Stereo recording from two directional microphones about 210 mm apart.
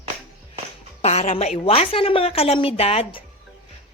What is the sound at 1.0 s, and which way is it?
A woman's voice, 30° left (ahead or behind).